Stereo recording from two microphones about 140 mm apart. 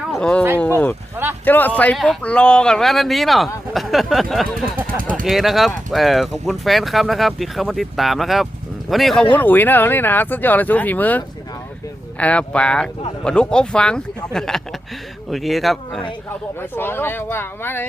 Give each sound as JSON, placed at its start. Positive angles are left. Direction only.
{"t": 0.1, "sound": "speech", "side_deg": 5}
{"t": 1.1, "sound": "speech", "side_deg": -15}
{"t": 1.5, "sound": "speech", "side_deg": 10}
{"t": 4.9, "sound": "speech", "side_deg": -80}
{"t": 5.2, "sound": "speech", "side_deg": 0}
{"t": 9.3, "sound": "speech", "side_deg": 15}
{"t": 16.6, "sound": "speech", "side_deg": 15}